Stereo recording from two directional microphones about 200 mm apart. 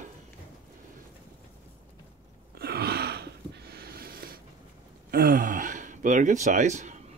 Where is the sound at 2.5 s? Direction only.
50° right (ahead or behind).